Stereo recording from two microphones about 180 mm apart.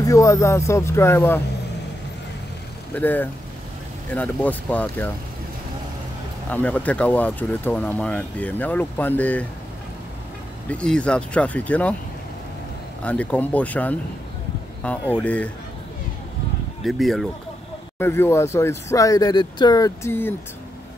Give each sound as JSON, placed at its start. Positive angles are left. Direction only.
{"t": 0.0, "sound": "speech", "side_deg": 15}
{"t": 2.9, "sound": "speech", "side_deg": 10}
{"t": 6.5, "sound": "speech", "side_deg": 10}
{"t": 10.7, "sound": "speech", "side_deg": 5}
{"t": 13.0, "sound": "speech", "side_deg": 5}
{"t": 16.8, "sound": "speech", "side_deg": 0}
{"t": 17.9, "sound": "speech", "side_deg": 15}